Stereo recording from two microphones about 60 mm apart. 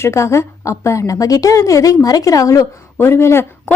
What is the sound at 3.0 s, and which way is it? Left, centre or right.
Speech, left.